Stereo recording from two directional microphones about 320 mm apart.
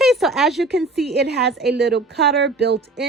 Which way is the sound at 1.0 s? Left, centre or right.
Right.